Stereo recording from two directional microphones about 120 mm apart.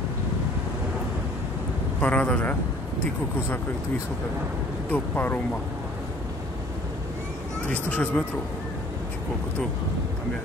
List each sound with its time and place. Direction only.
2.0 s a man's voice: 10° left (ahead or behind)
4.9 s a man's voice: 15° left (ahead or behind)
7.7 s a man's voice: 15° left (ahead or behind)